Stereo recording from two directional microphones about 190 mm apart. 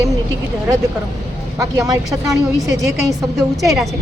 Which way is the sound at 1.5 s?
20° right (ahead or behind).